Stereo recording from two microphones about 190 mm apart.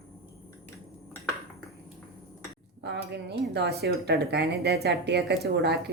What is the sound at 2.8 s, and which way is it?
Speech, 60° right (ahead or behind).